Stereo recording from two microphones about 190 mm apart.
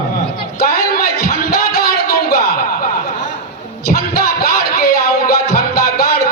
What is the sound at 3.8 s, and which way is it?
Music, 50° left (ahead or behind).